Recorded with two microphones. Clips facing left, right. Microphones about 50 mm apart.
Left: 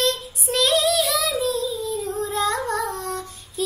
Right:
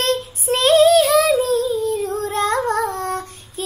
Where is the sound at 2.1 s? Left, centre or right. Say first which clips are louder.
Right 4 dB; right.